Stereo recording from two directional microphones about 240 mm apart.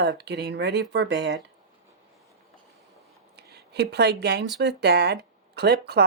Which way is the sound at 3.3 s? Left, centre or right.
Right.